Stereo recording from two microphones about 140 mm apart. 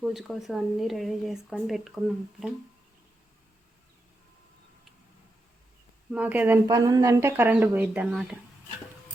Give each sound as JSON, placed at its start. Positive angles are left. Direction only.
{"t": 0.0, "sound": "speech", "side_deg": 0}
{"t": 6.1, "sound": "speech", "side_deg": -10}
{"t": 6.7, "sound": "speech", "side_deg": -25}